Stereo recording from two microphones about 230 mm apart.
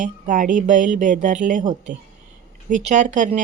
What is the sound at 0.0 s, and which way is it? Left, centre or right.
Speech, right.